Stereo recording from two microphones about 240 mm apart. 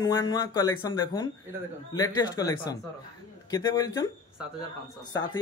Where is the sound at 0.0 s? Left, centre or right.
Centre.